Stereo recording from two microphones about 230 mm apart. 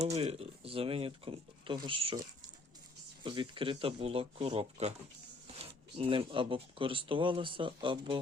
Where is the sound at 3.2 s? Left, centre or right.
Right.